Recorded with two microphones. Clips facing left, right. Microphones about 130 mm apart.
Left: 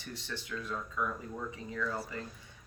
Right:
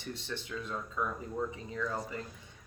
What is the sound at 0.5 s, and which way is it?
Speech, 20° right (ahead or behind).